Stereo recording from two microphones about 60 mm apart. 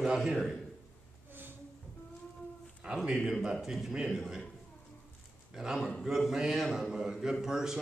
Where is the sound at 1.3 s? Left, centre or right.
Right.